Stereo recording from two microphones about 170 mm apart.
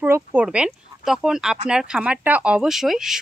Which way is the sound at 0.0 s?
10° right (ahead or behind).